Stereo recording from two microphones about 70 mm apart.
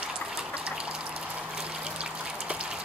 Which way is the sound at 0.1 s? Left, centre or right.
Centre.